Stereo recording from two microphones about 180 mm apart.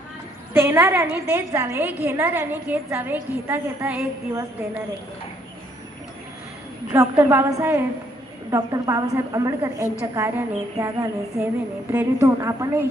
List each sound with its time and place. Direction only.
0.5 s a woman's voice: 10° right (ahead or behind)
6.9 s a woman's voice: 15° right (ahead or behind)